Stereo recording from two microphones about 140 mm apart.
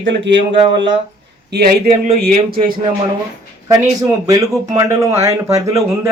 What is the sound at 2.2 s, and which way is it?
Speech, 90° right.